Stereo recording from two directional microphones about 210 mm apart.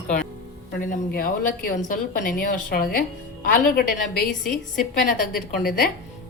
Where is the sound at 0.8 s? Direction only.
40° left (ahead or behind).